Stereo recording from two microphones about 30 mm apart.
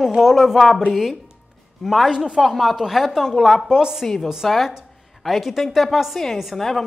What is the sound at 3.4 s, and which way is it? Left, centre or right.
Speech, centre.